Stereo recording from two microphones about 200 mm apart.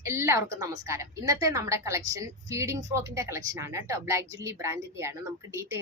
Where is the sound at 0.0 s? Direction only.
15° right (ahead or behind).